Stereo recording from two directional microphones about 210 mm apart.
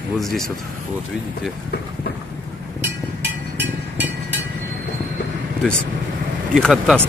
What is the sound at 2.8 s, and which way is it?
Vehicle, 55° right (ahead or behind).